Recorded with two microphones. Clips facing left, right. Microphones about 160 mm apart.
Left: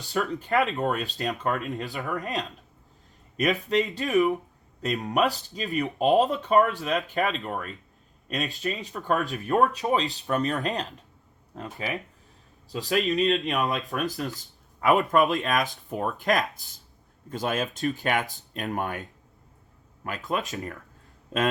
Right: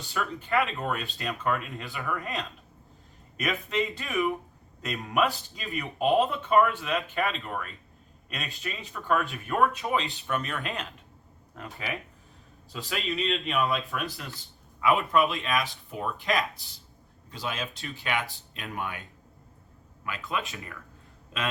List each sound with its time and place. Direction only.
0.0 s speech: 35° left (ahead or behind)
20.1 s speech: 40° left (ahead or behind)